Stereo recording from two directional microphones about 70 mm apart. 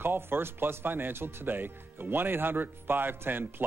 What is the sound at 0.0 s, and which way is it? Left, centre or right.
Speech, right.